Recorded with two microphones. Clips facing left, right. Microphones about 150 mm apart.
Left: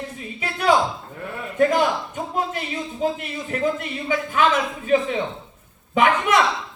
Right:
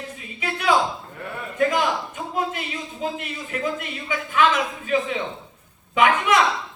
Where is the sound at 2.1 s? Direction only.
40° left (ahead or behind).